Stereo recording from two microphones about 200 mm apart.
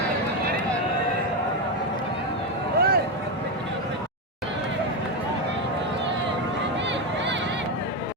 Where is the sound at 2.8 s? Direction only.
50° right (ahead or behind).